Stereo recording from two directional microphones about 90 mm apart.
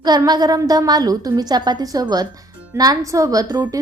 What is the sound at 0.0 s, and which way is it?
A woman's voice, 50° right (ahead or behind).